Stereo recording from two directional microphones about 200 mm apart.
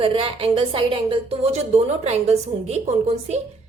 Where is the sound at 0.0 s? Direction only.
25° right (ahead or behind).